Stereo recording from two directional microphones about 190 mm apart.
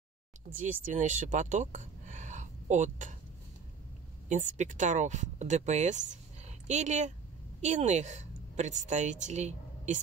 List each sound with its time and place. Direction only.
0.5 s speech: 45° right (ahead or behind)
4.3 s a woman's voice: 40° right (ahead or behind)